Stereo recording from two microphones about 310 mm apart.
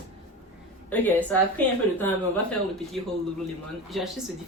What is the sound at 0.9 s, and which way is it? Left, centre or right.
Speech, centre.